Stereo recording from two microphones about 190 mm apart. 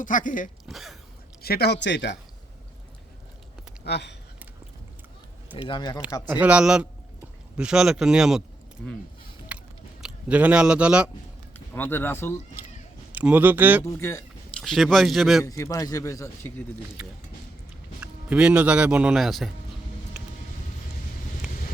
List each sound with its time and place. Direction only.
0.0 s speech: 45° left (ahead or behind)
0.7 s throat clearing: centre (ahead or behind)
1.4 s speech: 55° left (ahead or behind)
3.8 s speech: 60° left (ahead or behind)
5.6 s speech: 25° left (ahead or behind)
6.2 s speech: 10° right (ahead or behind)
9.5 s biting: 5° right (ahead or behind)
10.0 s a man's voice: 5° right (ahead or behind)
11.7 s a man's voice: 10° left (ahead or behind)
13.1 s speech: 10° right (ahead or behind)
13.8 s a man's voice: 15° left (ahead or behind)
14.6 s speech: centre (ahead or behind)
15.4 s a man's voice: 15° left (ahead or behind)
17.0 s a man's voice: 5° right (ahead or behind)